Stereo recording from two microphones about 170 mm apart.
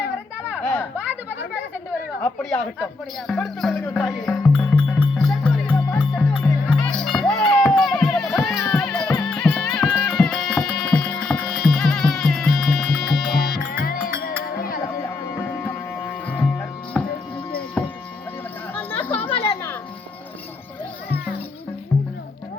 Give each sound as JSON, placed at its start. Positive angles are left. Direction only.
{"t": 0.5, "sound": "children playing", "side_deg": 5}
{"t": 2.2, "sound": "speech", "side_deg": 10}
{"t": 4.9, "sound": "music", "side_deg": 0}
{"t": 10.2, "sound": "music", "side_deg": 0}
{"t": 13.7, "sound": "music", "side_deg": 60}
{"t": 16.2, "sound": "music", "side_deg": 10}
{"t": 17.8, "sound": "a sound", "side_deg": 5}
{"t": 19.4, "sound": "music", "side_deg": 15}